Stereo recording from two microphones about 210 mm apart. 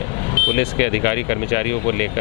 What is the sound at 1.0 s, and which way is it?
Speech, 15° left (ahead or behind).